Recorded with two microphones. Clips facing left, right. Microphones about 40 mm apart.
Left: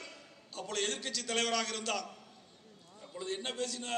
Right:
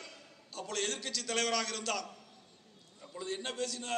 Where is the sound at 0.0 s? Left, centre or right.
Left.